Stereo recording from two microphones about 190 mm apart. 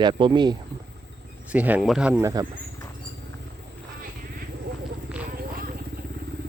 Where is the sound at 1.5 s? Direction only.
5° right (ahead or behind).